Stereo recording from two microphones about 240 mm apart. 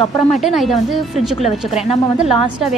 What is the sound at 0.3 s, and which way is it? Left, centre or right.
A woman's voice, centre.